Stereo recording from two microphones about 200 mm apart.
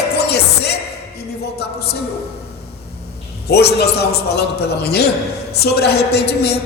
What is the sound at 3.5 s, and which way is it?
Speech, 55° left (ahead or behind).